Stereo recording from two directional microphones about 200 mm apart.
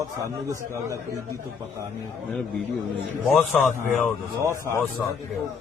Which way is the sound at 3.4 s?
5° left (ahead or behind).